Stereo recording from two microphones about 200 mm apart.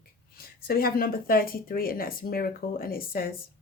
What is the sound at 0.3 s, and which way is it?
Speech, 50° left (ahead or behind).